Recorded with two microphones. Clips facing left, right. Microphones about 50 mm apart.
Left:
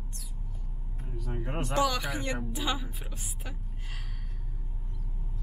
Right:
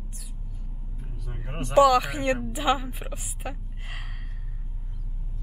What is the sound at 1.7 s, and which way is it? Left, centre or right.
Speech, centre.